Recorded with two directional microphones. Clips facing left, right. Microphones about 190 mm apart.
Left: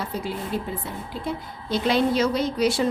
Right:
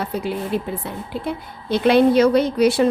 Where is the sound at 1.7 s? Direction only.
60° right (ahead or behind).